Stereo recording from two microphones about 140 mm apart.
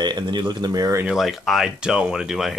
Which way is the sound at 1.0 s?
Centre (ahead or behind).